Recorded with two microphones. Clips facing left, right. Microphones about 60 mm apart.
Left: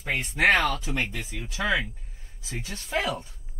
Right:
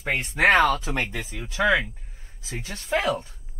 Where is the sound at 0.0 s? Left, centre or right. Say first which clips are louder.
Right 2 dB; right.